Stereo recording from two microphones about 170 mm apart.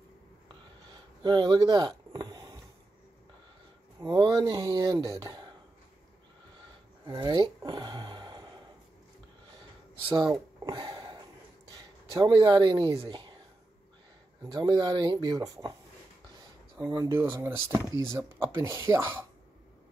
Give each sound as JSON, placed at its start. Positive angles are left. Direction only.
{"t": 1.2, "sound": "a sound", "side_deg": -25}
{"t": 4.0, "sound": "speech", "side_deg": -25}
{"t": 7.1, "sound": "speech", "side_deg": -25}
{"t": 10.0, "sound": "a sound", "side_deg": -25}
{"t": 12.1, "sound": "speech", "side_deg": -25}
{"t": 14.4, "sound": "speech", "side_deg": -25}
{"t": 16.9, "sound": "speech", "side_deg": -15}